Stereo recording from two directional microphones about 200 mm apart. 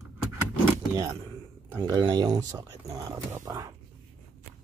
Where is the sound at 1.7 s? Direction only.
20° right (ahead or behind).